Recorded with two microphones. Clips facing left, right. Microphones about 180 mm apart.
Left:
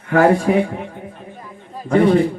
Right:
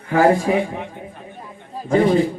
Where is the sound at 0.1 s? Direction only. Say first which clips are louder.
Left 1 dB; 65° left (ahead or behind).